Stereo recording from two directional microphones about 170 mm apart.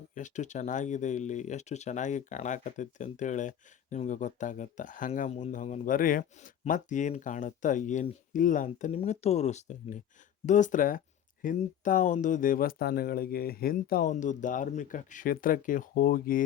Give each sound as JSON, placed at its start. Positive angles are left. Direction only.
{"t": 0.1, "sound": "speech", "side_deg": 45}